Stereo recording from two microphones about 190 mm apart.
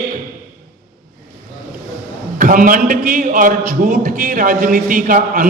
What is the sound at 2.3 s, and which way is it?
A man's voice, 45° right (ahead or behind).